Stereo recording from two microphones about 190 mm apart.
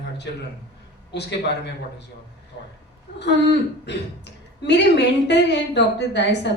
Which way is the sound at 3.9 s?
65° left (ahead or behind).